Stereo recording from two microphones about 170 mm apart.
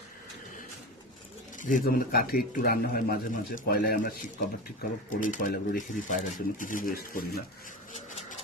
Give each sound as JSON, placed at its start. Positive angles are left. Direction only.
{"t": 1.5, "sound": "speech", "side_deg": 50}